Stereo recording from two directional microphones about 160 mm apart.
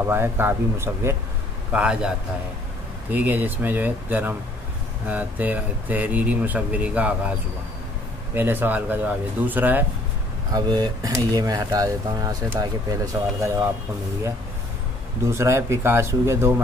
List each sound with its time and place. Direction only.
0.0 s a man's voice: 15° right (ahead or behind)
8.4 s speech: 10° right (ahead or behind)
10.5 s speech: 25° right (ahead or behind)
15.2 s speech: 15° right (ahead or behind)